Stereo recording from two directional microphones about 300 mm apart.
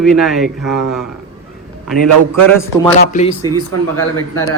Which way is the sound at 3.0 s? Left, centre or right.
Left.